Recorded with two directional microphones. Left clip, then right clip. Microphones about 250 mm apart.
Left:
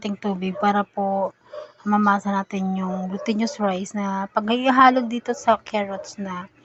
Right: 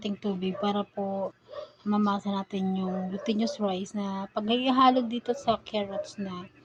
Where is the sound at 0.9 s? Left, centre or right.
Left.